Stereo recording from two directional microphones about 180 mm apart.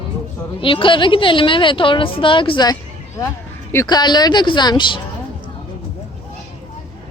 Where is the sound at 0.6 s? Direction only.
30° left (ahead or behind).